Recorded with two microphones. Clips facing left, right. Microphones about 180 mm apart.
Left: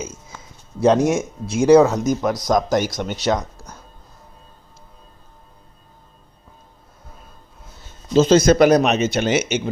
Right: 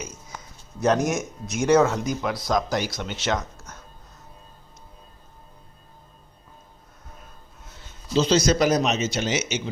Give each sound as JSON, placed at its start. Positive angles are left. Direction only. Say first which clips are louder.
{"t": 0.0, "sound": "a sound", "louder": "left 5 dB", "side_deg": 25}
{"t": 0.8, "sound": "speech", "louder": "left 6 dB", "side_deg": 30}
{"t": 1.9, "sound": "speech", "louder": "left 6 dB", "side_deg": 45}
{"t": 8.1, "sound": "speech", "louder": "left 7 dB", "side_deg": 50}